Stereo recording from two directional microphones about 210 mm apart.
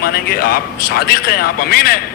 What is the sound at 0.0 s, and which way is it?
A man's voice, 45° left (ahead or behind).